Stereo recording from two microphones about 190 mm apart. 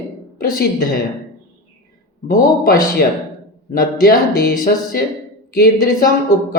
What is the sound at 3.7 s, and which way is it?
A man's voice, 55° left (ahead or behind).